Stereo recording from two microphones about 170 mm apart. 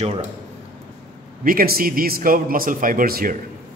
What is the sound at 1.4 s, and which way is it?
Speech, 60° right (ahead or behind).